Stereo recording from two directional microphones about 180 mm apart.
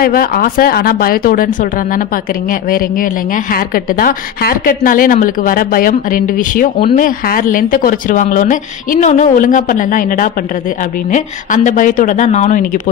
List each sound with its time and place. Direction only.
0.0 s speech: 55° left (ahead or behind)
3.5 s a woman's voice: 55° left (ahead or behind)